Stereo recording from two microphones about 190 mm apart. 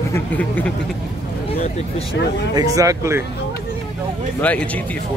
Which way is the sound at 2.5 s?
20° right (ahead or behind).